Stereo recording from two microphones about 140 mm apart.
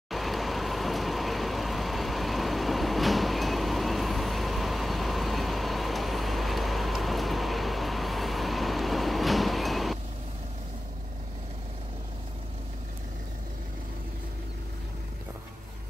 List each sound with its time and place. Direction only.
0.1 s vehicle: centre (ahead or behind)